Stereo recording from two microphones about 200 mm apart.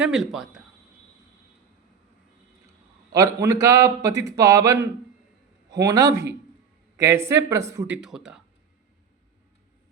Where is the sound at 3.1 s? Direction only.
15° right (ahead or behind).